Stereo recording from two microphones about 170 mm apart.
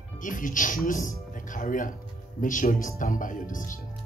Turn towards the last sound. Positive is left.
turn(degrees=50)  # may be behind; listen again after turning